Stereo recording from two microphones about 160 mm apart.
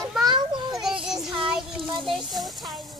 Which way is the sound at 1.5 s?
Centre (ahead or behind).